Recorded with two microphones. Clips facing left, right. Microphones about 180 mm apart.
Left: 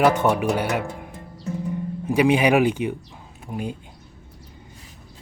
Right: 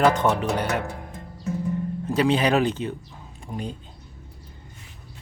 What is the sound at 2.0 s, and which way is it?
Speech, 10° left (ahead or behind).